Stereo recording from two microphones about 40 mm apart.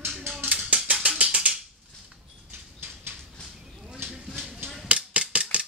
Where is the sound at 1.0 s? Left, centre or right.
Right.